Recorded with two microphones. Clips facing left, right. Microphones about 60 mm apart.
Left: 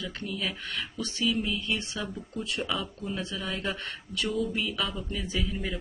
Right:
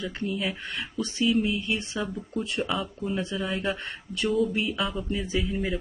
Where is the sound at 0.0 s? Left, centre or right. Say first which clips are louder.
Right 4 dB; right.